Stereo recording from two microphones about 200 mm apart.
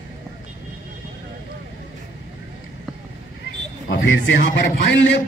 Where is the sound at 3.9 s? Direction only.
70° left (ahead or behind).